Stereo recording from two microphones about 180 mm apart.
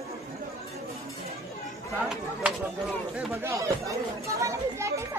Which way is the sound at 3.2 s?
15° right (ahead or behind).